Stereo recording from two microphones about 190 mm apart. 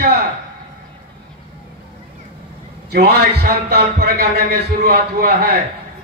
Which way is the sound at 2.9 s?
55° right (ahead or behind).